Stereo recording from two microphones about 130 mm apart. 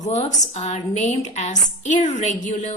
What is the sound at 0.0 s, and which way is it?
A woman's voice, 60° left (ahead or behind).